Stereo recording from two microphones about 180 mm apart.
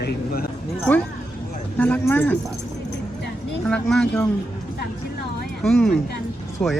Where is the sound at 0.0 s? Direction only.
60° left (ahead or behind).